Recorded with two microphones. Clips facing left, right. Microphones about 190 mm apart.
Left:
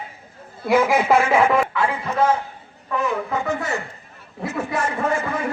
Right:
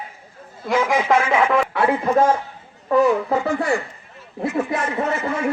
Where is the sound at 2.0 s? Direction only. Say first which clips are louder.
Right 1 dB; 45° right (ahead or behind); by 5.1 s 25° right (ahead or behind).